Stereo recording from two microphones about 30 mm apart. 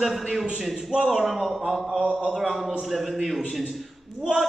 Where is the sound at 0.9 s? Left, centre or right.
Right.